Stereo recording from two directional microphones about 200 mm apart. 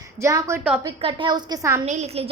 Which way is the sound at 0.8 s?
25° right (ahead or behind).